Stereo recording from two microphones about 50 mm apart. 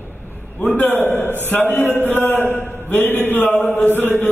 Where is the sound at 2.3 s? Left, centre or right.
Left.